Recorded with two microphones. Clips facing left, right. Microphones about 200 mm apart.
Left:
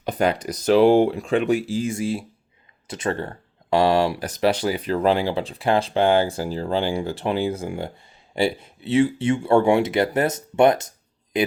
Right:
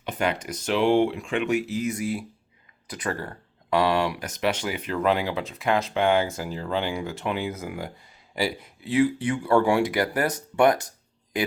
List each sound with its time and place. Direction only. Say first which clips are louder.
0.0 s speech: left 5 dB; 35° left (ahead or behind)